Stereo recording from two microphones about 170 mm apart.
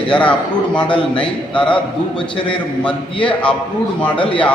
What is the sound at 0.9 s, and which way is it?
Speech, 30° left (ahead or behind).